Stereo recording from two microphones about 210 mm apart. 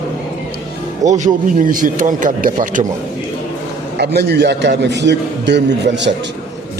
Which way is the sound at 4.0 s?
50° right (ahead or behind).